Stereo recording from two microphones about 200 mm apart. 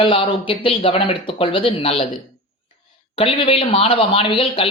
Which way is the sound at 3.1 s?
25° left (ahead or behind).